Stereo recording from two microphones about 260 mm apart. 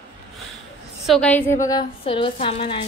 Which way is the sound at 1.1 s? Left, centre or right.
Centre.